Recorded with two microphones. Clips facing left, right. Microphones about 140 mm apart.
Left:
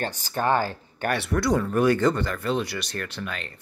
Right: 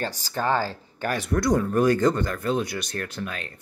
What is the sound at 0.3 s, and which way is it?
Speech, 20° left (ahead or behind).